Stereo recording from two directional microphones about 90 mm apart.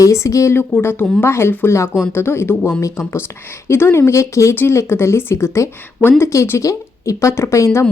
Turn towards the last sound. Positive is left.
turn(degrees=30)  # may be behind; listen again after turning